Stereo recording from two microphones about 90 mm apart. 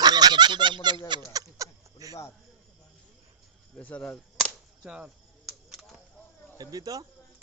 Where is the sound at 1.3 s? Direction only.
40° right (ahead or behind).